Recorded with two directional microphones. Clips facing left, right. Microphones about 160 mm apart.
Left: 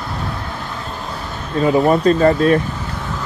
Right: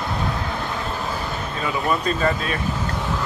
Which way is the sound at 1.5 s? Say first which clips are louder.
Left 11 dB; 40° left (ahead or behind).